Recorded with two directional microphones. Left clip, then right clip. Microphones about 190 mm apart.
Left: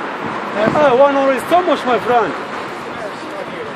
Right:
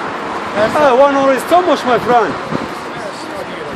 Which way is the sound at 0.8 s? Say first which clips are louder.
Right 2 dB; 15° right (ahead or behind).